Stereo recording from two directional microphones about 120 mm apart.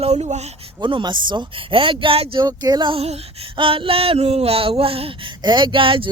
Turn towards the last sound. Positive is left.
turn(degrees=-50)  # may be behind; listen again after turning